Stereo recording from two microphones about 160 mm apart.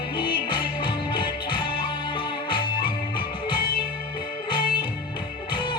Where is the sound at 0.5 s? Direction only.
30° left (ahead or behind).